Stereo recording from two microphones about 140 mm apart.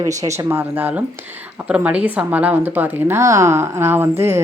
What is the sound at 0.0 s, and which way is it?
A woman's voice, 25° right (ahead or behind).